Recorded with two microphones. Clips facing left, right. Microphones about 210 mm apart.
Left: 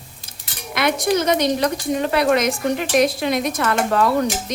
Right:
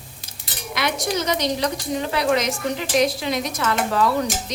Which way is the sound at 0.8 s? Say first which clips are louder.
Left 5 dB; 55° left (ahead or behind).